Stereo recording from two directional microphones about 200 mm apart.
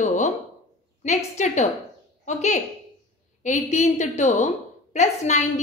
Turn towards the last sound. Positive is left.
turn(degrees=35)  # may be behind; listen again after turning